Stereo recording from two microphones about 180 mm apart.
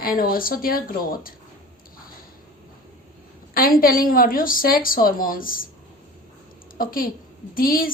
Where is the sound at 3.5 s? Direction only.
50° left (ahead or behind).